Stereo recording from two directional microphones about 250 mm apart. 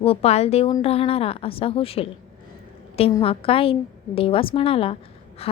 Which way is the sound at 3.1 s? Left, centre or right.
Left.